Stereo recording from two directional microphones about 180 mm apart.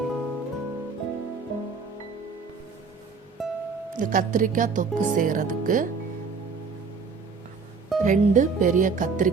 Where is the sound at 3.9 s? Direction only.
50° right (ahead or behind).